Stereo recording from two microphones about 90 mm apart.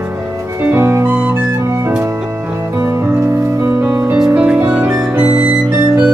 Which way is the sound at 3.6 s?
25° right (ahead or behind).